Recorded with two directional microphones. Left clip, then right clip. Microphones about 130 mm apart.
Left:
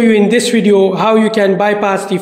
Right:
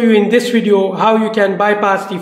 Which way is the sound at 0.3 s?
35° left (ahead or behind).